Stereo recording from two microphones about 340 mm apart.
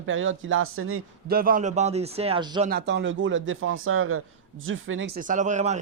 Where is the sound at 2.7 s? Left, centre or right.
Right.